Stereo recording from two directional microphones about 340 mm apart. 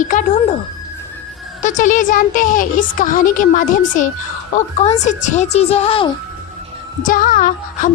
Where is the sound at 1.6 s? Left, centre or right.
Left.